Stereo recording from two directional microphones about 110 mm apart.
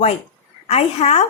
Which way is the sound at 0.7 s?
70° left (ahead or behind).